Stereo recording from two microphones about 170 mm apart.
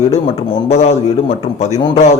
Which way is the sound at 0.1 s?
40° left (ahead or behind).